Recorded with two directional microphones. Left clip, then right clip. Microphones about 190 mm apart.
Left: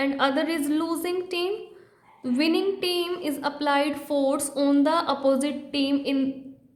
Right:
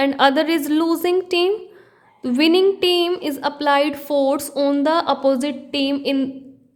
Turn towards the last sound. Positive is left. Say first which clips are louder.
# right 5 dB
turn(degrees=-40)  # may be behind; listen again after turning